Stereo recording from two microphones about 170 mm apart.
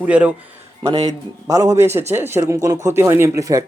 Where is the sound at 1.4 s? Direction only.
20° right (ahead or behind).